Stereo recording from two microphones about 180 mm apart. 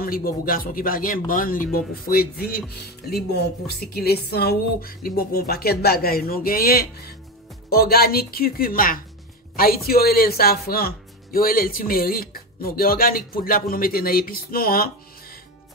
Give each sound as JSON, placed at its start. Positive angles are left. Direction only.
{"t": 0.0, "sound": "speech", "side_deg": 55}